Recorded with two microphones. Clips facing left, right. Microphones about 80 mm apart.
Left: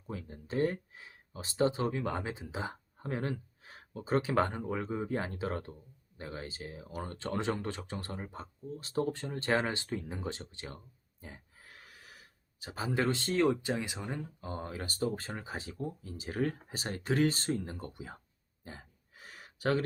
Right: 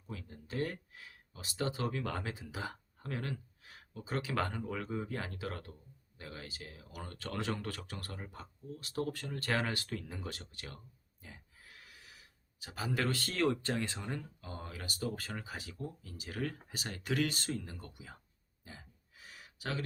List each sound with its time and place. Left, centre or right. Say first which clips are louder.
0.1 s speech: left 5 dB; left; by 14.2 s centre
14.4 s speech: left 5 dB; left
18.6 s a sound: left 5 dB; left